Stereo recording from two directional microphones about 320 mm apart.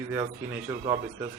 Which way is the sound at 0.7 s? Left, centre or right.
Centre.